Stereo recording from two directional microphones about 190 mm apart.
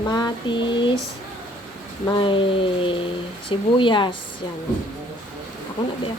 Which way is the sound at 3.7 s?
25° left (ahead or behind).